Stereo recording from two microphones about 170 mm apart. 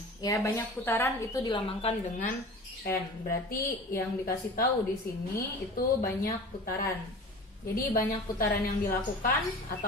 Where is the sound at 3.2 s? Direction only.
60° left (ahead or behind).